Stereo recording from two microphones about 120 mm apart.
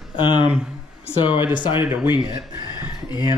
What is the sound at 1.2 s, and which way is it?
Speech, 40° left (ahead or behind).